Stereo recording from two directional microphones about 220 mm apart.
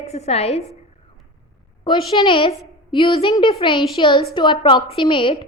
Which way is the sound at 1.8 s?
20° left (ahead or behind).